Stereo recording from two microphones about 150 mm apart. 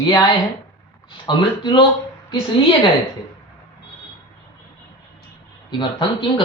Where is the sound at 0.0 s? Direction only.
30° left (ahead or behind).